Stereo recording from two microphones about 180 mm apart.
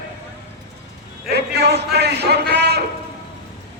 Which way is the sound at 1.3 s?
65° right (ahead or behind).